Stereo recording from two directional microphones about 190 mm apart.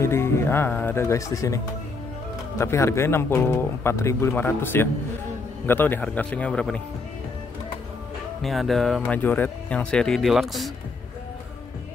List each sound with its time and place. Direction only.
0.0 s a man's voice: 15° left (ahead or behind)
2.6 s a man's voice: 15° left (ahead or behind)
8.4 s speech: centre (ahead or behind)